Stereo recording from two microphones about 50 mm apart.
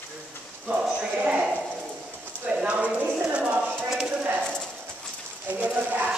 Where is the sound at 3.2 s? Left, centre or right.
Right.